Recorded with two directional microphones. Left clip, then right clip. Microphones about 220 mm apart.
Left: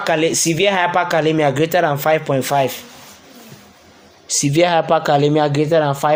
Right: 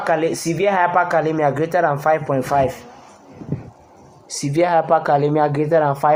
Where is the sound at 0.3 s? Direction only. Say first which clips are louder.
Left 3 dB; 50° left (ahead or behind).